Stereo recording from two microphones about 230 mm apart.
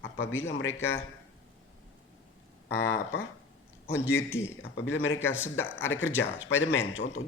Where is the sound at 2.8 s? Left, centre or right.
Left.